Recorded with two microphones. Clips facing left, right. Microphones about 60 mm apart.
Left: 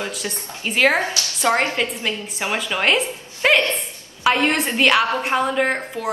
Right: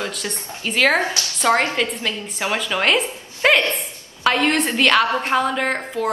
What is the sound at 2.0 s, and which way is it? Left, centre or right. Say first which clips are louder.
A woman's voice: right 1 dB; centre.